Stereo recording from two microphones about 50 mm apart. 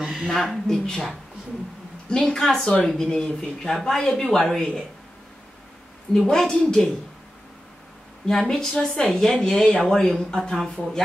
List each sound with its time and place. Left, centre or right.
0.0 s speech: centre
0.4 s a woman's voice: centre
6.2 s speech: centre
8.3 s speech: centre